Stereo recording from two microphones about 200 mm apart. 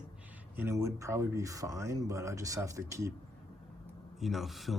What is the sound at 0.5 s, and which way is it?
Speech, 10° right (ahead or behind).